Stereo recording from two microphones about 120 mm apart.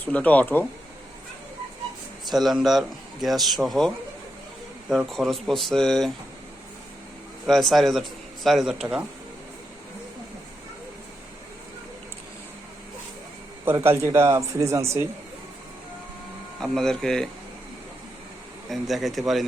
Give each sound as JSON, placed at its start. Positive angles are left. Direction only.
{"t": 0.0, "sound": "speech", "side_deg": 10}
{"t": 2.3, "sound": "speech", "side_deg": 0}
{"t": 7.4, "sound": "speech", "side_deg": 0}
{"t": 13.7, "sound": "speech", "side_deg": -20}
{"t": 16.6, "sound": "speech", "side_deg": 5}
{"t": 18.7, "sound": "speech", "side_deg": 0}